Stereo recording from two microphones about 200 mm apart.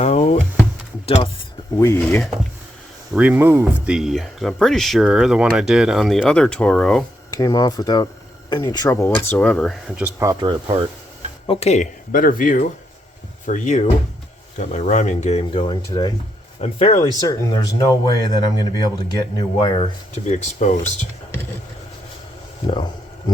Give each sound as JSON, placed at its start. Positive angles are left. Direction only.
{"t": 0.0, "sound": "a sound", "side_deg": 35}
{"t": 1.0, "sound": "speech", "side_deg": 30}
{"t": 1.7, "sound": "speech", "side_deg": 15}
{"t": 3.1, "sound": "speech", "side_deg": -5}
{"t": 7.3, "sound": "a man's voice", "side_deg": 20}
{"t": 10.0, "sound": "speech", "side_deg": -15}
{"t": 10.4, "sound": "speech", "side_deg": -25}
{"t": 11.4, "sound": "speech", "side_deg": 35}
{"t": 16.6, "sound": "speech", "side_deg": 30}
{"t": 17.2, "sound": "a man's voice", "side_deg": 20}
{"t": 20.1, "sound": "speech", "side_deg": 35}
{"t": 22.6, "sound": "a sound", "side_deg": 25}